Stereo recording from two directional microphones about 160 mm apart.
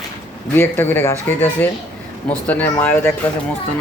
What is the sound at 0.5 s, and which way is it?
Speech, 15° left (ahead or behind).